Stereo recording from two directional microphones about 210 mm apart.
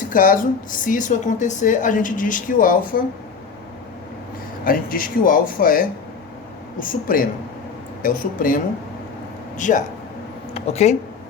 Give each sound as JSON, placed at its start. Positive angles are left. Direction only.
{"t": 0.1, "sound": "a woman's voice", "side_deg": 40}
{"t": 4.6, "sound": "a woman's voice", "side_deg": 40}